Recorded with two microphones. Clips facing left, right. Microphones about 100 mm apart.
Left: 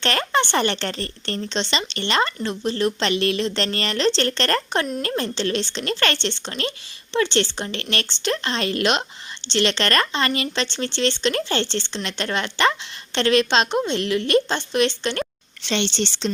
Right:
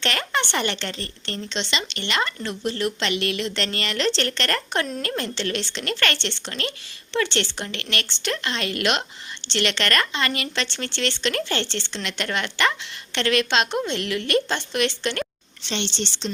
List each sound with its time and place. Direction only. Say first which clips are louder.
0.0 s a woman's voice: left 4 dB; 35° left (ahead or behind)
15.6 s speech: left 5 dB; 85° left